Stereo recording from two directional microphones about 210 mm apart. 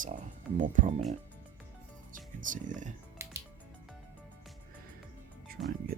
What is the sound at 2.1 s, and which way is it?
Speech, 40° right (ahead or behind).